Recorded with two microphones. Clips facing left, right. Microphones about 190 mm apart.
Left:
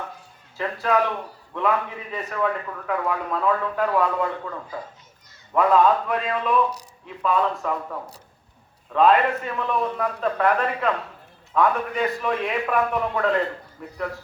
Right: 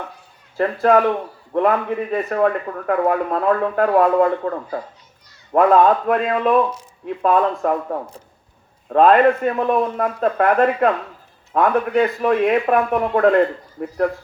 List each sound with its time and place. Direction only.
0.5 s a man's voice: 50° right (ahead or behind)